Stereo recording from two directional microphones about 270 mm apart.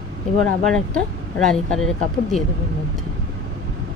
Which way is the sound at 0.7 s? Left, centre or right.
Centre.